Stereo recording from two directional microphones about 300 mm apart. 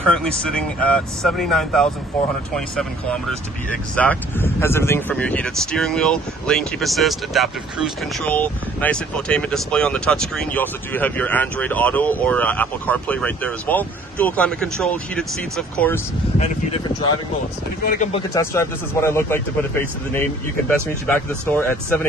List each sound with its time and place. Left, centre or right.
0.0 s speech: centre
17.8 s speech: left
18.3 s speech: centre
21.1 s speech: centre